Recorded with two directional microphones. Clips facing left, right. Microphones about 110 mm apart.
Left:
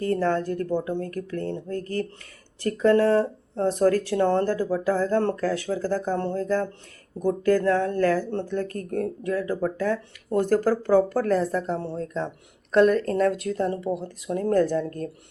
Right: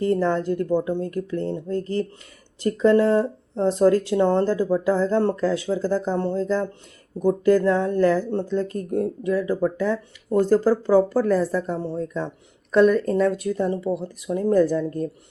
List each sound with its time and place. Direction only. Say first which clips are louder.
0.0 s speech: right 2 dB; 20° right (ahead or behind)